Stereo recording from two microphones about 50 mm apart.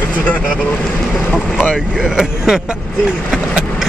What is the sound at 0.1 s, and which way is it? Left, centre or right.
Speech, left.